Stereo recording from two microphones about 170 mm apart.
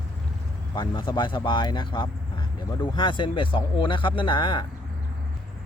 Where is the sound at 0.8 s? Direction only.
25° left (ahead or behind).